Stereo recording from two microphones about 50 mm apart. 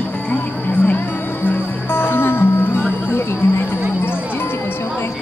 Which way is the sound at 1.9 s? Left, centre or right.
Left.